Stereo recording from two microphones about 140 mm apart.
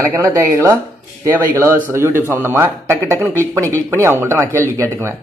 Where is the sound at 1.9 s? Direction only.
15° right (ahead or behind).